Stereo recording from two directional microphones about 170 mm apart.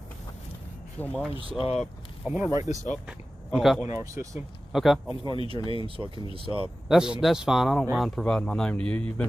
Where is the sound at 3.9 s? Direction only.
15° right (ahead or behind).